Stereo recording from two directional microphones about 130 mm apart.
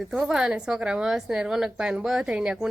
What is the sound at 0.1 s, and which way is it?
Speech, 5° right (ahead or behind).